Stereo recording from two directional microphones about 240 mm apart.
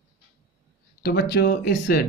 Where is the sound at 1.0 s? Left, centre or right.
Left.